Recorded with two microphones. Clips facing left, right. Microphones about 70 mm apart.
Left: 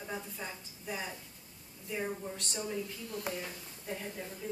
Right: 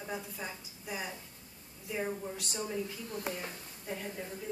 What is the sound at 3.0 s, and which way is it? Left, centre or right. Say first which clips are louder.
Speech: right 1 dB; right.